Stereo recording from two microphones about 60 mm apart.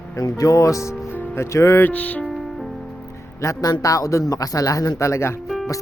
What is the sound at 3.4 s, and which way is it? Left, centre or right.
Speech, left.